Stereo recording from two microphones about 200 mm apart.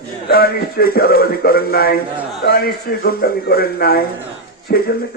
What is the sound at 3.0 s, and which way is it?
A man's voice, 50° left (ahead or behind).